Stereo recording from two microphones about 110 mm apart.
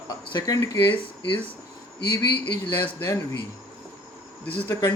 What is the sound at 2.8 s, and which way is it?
Speech, 25° left (ahead or behind).